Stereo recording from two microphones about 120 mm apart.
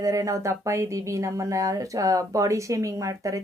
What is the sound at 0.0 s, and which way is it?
Speech, 30° right (ahead or behind).